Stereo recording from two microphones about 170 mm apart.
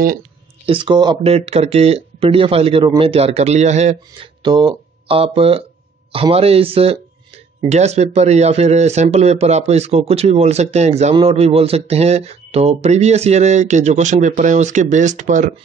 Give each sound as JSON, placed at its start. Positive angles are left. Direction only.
{"t": 0.7, "sound": "speech", "side_deg": -30}
{"t": 4.4, "sound": "speech", "side_deg": -25}